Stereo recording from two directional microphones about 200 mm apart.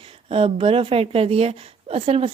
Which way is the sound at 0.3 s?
30° right (ahead or behind).